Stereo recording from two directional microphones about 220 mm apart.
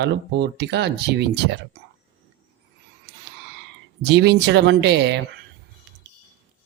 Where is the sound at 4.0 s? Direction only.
50° right (ahead or behind).